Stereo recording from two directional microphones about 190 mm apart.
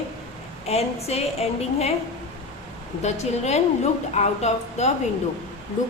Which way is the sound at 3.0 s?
35° left (ahead or behind).